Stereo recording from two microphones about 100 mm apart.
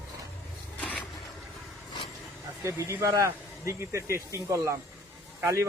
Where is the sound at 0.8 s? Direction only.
10° left (ahead or behind).